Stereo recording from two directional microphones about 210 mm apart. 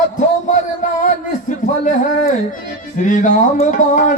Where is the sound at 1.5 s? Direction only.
40° left (ahead or behind).